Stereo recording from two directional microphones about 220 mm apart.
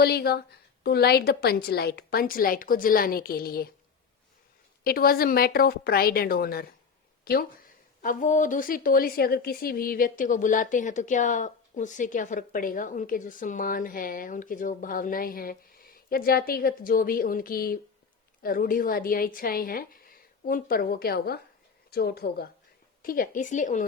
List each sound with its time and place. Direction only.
0.0 s a woman's voice: 45° left (ahead or behind)
4.8 s a woman's voice: 45° left (ahead or behind)